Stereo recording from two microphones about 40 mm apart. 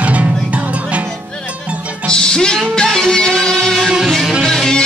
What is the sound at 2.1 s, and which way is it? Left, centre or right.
Music, centre.